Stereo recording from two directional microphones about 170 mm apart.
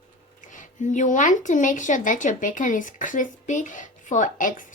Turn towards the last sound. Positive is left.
turn(degrees=50)  # may be behind; listen again after turning